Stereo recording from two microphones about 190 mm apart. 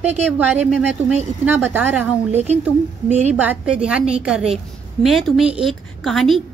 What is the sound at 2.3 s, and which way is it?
A woman's voice, 35° right (ahead or behind).